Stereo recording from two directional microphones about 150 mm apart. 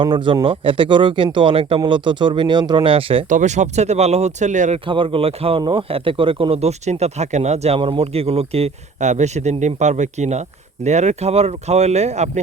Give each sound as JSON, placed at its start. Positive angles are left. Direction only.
{"t": 0.0, "sound": "speech", "side_deg": -30}
{"t": 3.2, "sound": "speech", "side_deg": -55}
{"t": 4.9, "sound": "speech", "side_deg": -35}